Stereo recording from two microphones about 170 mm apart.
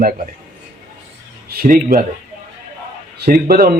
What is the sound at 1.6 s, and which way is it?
Speech, 55° right (ahead or behind).